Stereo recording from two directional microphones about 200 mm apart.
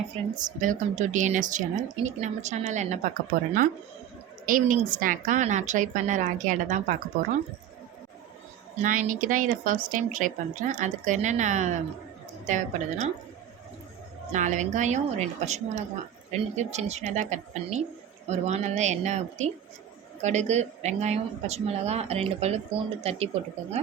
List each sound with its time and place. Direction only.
0.3 s a woman's voice: 40° right (ahead or behind)
8.8 s a woman's voice: 40° right (ahead or behind)
14.3 s a woman's voice: 35° right (ahead or behind)